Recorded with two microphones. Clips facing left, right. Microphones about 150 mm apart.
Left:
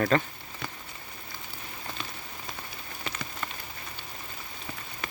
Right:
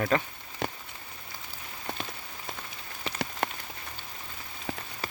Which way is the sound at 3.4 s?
75° right (ahead or behind).